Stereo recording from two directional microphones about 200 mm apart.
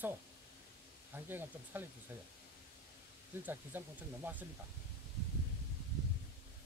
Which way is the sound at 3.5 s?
10° right (ahead or behind).